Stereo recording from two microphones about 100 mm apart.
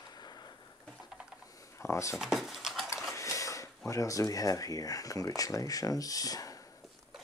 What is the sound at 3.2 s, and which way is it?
Speech, 30° left (ahead or behind).